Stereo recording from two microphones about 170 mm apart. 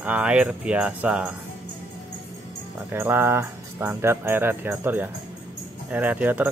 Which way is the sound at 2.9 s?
15° right (ahead or behind).